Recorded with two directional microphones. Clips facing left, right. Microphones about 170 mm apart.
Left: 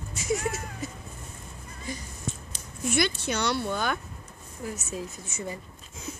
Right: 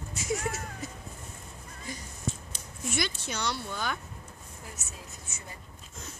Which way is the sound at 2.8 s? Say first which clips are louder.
Left 6 dB; 65° left (ahead or behind).